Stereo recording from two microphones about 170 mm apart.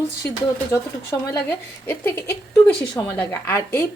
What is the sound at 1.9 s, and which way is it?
A woman's voice, 15° left (ahead or behind).